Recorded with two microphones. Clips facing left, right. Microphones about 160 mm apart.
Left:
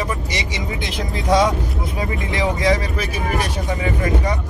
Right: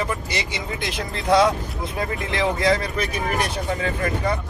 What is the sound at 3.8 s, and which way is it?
Speech, 15° left (ahead or behind).